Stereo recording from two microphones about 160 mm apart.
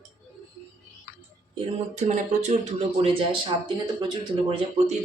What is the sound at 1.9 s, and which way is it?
Speech, 45° right (ahead or behind).